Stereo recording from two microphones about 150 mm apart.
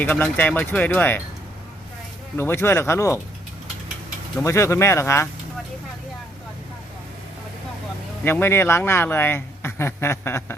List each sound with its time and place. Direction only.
0.0 s speech: 15° left (ahead or behind)
2.3 s speech: 15° left (ahead or behind)
4.4 s speech: 20° left (ahead or behind)
8.2 s speech: 15° left (ahead or behind)